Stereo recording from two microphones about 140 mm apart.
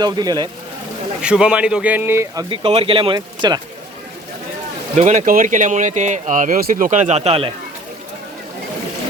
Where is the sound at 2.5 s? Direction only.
45° right (ahead or behind).